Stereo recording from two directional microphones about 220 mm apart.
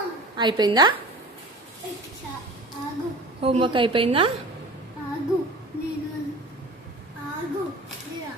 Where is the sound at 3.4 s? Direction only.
25° right (ahead or behind).